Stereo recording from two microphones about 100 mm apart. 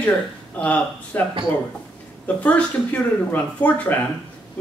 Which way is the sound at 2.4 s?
15° left (ahead or behind).